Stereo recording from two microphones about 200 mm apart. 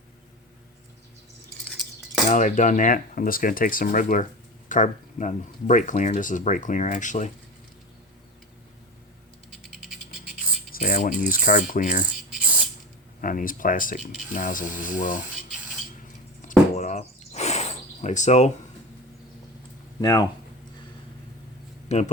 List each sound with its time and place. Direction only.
2.3 s speech: 40° left (ahead or behind)
9.5 s a sound: centre (ahead or behind)
10.7 s speech: 45° left (ahead or behind)
12.3 s spray: 5° right (ahead or behind)
13.2 s speech: 45° left (ahead or behind)
16.5 s a sound: 35° left (ahead or behind)
20.0 s speech: 20° left (ahead or behind)
21.8 s speech: 35° left (ahead or behind)